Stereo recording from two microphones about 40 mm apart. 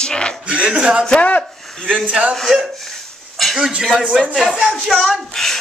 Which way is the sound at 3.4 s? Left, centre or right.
Centre.